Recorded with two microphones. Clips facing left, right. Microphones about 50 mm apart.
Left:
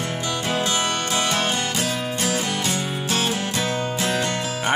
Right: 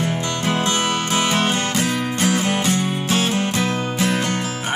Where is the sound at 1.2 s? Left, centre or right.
Centre.